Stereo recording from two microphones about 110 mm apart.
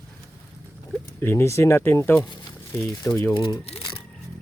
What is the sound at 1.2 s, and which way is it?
Speech, 25° left (ahead or behind).